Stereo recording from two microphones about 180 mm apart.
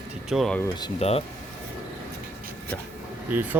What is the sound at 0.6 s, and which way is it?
Speech, 25° left (ahead or behind).